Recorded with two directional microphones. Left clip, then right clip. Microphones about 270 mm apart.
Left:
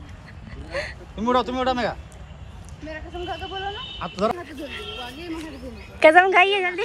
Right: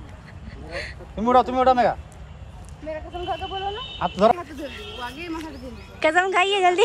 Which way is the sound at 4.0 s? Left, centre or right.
Right.